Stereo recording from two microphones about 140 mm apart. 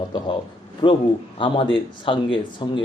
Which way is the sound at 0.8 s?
35° left (ahead or behind).